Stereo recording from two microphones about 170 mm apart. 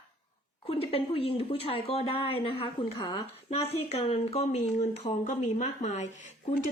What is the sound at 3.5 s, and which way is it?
Speech, 35° left (ahead or behind).